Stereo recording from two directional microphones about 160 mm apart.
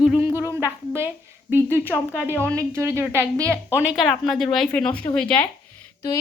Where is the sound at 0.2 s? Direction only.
15° right (ahead or behind).